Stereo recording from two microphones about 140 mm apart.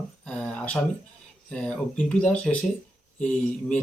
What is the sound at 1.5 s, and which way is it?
Speech, 10° left (ahead or behind).